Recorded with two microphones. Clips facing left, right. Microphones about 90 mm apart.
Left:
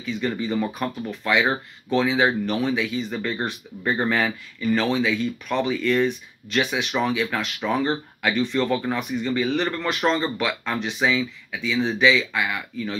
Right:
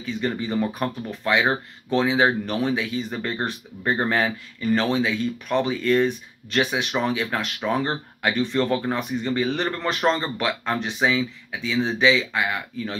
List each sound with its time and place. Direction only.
0.0 s speech: 30° right (ahead or behind)